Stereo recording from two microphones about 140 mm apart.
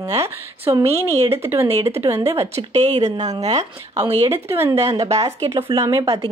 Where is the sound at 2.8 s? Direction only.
50° right (ahead or behind).